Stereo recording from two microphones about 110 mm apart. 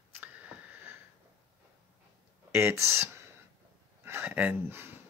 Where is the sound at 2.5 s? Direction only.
25° right (ahead or behind).